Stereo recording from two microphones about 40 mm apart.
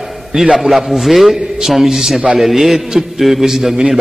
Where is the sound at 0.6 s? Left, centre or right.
Centre.